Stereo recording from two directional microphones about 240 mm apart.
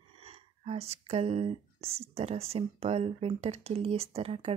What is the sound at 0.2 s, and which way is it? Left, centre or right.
Speech, right.